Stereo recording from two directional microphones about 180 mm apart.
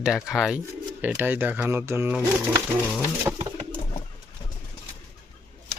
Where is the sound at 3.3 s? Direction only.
15° right (ahead or behind).